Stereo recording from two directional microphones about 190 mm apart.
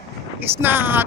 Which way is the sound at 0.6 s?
10° right (ahead or behind).